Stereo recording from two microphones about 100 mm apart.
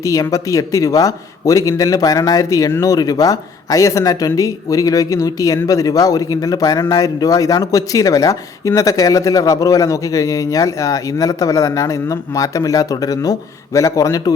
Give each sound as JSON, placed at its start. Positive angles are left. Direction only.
{"t": 0.0, "sound": "speech", "side_deg": 35}